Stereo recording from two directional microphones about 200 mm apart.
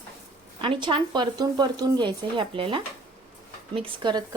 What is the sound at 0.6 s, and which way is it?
A woman's voice, 25° right (ahead or behind).